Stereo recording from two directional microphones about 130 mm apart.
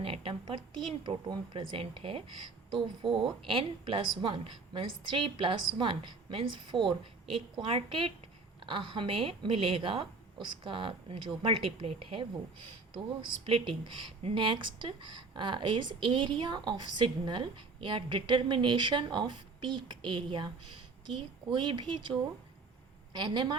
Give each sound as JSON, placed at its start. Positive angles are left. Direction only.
{"t": 0.0, "sound": "a sound", "side_deg": -45}
{"t": 1.0, "sound": "a woman's voice", "side_deg": -35}
{"t": 23.1, "sound": "speech", "side_deg": -35}